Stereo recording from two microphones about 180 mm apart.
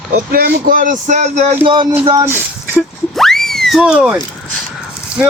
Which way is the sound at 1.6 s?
25° right (ahead or behind).